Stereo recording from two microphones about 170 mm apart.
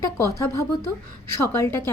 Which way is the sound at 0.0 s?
15° left (ahead or behind).